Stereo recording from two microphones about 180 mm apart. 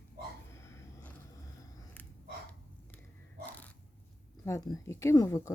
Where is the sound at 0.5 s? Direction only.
15° left (ahead or behind).